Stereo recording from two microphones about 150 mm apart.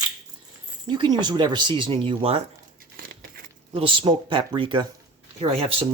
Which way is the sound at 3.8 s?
35° right (ahead or behind).